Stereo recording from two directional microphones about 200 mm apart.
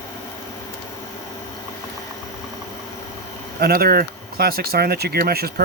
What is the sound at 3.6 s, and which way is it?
Speech, 50° right (ahead or behind).